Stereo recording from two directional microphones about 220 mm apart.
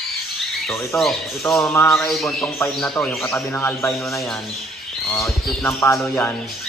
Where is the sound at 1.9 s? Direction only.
Centre (ahead or behind).